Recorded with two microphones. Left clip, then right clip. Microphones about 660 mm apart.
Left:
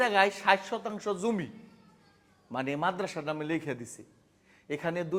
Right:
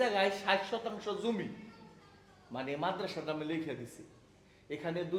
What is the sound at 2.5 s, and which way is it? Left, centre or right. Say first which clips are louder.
Speech: left 5 dB; left.